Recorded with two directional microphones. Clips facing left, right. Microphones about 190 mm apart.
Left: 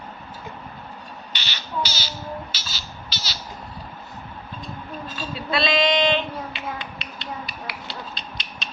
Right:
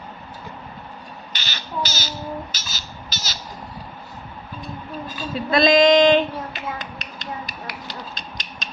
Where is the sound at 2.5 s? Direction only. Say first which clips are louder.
Right 1 dB; 45° right (ahead or behind).